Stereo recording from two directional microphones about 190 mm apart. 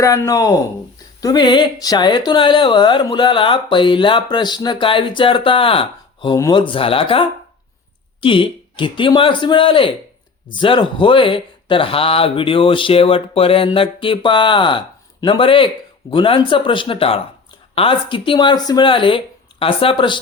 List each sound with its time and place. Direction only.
0.0 s speech: 15° left (ahead or behind)